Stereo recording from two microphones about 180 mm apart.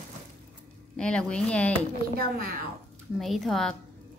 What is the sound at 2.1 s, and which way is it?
Speech, 50° right (ahead or behind).